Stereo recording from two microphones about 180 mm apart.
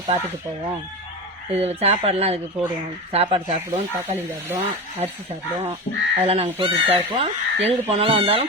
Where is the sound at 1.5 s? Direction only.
35° right (ahead or behind).